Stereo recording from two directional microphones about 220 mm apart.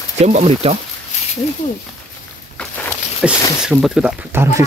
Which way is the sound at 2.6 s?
5° left (ahead or behind).